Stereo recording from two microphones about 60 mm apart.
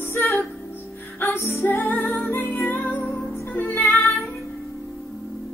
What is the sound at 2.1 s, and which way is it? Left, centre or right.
Music, left.